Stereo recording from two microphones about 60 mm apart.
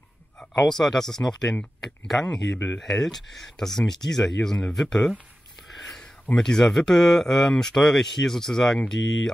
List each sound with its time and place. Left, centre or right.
0.4 s speech: centre
2.5 s speech: left
2.8 s speech: centre
5.7 s a sound: centre
6.3 s speech: centre